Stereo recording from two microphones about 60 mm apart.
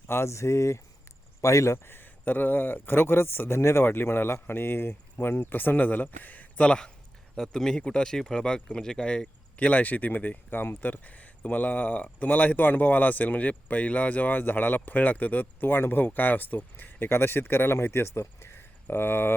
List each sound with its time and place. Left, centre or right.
0.1 s speech: left
6.6 s speech: centre
9.6 s speech: left